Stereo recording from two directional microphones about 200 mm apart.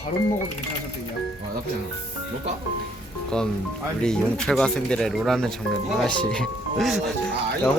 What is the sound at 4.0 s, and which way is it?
A man's voice, 5° left (ahead or behind).